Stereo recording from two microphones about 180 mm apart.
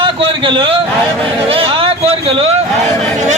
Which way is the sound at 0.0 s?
30° right (ahead or behind).